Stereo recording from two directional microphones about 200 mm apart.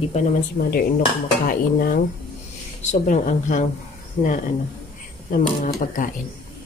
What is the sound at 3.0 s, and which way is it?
Speech, 40° left (ahead or behind).